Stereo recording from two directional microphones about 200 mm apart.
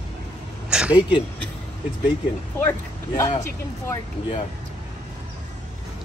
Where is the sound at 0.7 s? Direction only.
5° right (ahead or behind).